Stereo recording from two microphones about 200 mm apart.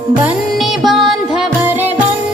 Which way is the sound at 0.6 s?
Centre (ahead or behind).